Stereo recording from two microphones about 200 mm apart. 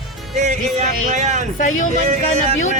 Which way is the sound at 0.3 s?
35° right (ahead or behind).